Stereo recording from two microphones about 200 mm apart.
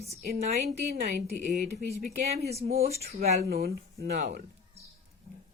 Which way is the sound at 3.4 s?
50° right (ahead or behind).